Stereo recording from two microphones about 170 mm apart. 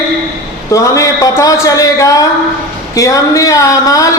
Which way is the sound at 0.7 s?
20° left (ahead or behind).